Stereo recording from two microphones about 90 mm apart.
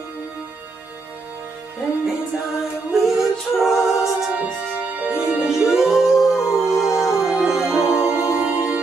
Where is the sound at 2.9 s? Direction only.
5° right (ahead or behind).